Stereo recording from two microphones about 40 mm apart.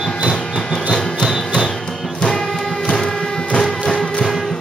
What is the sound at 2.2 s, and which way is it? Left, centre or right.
Music, centre.